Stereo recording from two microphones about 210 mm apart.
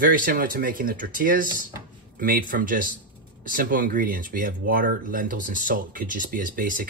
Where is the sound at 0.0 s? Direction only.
40° right (ahead or behind).